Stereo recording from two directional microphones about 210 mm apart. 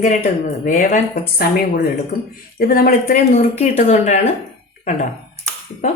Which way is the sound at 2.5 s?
45° left (ahead or behind).